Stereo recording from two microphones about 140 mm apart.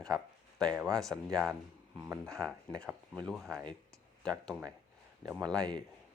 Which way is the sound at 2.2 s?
5° left (ahead or behind).